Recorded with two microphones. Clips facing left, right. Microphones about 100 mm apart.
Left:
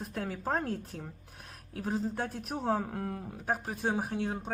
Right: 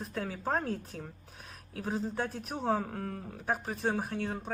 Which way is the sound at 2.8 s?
20° left (ahead or behind).